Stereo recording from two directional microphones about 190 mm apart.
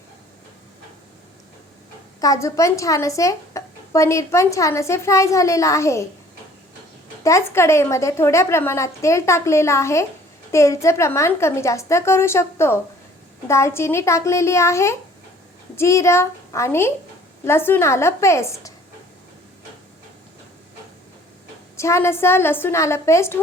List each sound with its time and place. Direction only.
2.2 s a woman's voice: 15° left (ahead or behind)
7.3 s a woman's voice: 15° left (ahead or behind)
21.8 s a woman's voice: 15° left (ahead or behind)